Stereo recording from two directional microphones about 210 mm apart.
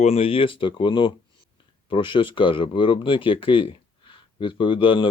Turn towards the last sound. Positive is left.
turn(degrees=25)  # may be behind; listen again after turning